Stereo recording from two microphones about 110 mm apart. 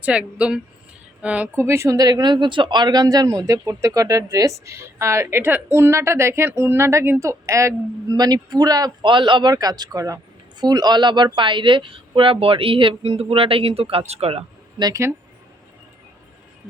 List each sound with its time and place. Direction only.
0.0 s speech: 10° right (ahead or behind)
1.5 s speech: 25° right (ahead or behind); by 14.4 s 65° right (ahead or behind)